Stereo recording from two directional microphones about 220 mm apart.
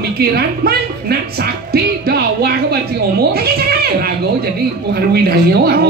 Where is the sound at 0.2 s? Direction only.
45° right (ahead or behind).